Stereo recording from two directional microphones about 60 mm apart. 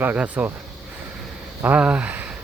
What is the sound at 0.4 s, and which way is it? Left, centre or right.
Speech, right.